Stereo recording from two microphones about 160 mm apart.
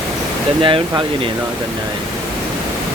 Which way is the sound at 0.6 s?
30° right (ahead or behind).